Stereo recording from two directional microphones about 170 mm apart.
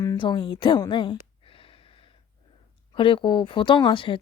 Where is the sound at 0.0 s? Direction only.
25° left (ahead or behind).